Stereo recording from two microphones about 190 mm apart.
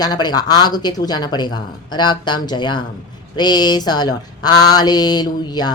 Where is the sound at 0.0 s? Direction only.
20° left (ahead or behind).